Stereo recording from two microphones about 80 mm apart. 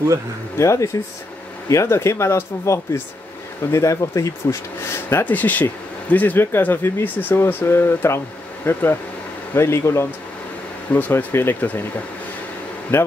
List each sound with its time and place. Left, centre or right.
0.6 s speech: left
5.2 s speech: left
9.5 s speech: left
10.9 s speech: left
12.9 s speech: left